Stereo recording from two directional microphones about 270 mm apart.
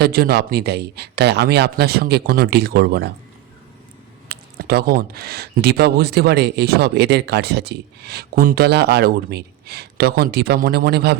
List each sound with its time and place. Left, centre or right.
0.0 s speech: right
4.3 s speech: right